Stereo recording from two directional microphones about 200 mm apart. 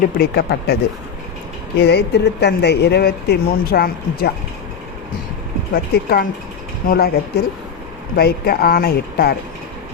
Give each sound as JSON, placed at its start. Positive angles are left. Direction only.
{"t": 0.2, "sound": "speech", "side_deg": 55}
{"t": 1.8, "sound": "speech", "side_deg": 55}
{"t": 5.7, "sound": "speech", "side_deg": 50}